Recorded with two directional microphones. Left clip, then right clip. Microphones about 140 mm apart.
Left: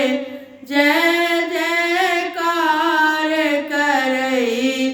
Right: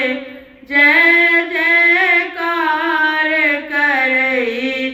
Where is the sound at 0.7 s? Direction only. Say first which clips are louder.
Right 5 dB; 25° left (ahead or behind).